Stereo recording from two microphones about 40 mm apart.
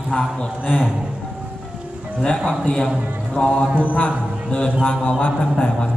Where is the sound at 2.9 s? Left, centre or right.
Right.